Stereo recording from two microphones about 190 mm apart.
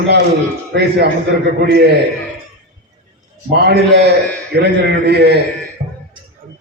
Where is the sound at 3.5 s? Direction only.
60° right (ahead or behind).